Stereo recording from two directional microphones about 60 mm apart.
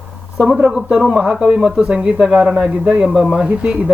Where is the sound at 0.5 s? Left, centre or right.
Centre.